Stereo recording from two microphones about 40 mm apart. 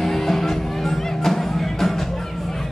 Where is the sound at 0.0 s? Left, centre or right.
Centre.